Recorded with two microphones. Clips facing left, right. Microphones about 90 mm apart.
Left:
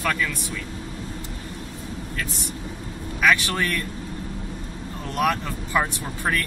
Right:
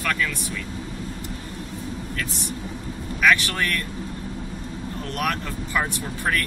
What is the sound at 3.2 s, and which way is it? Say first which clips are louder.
Speech: even; 15° left (ahead or behind).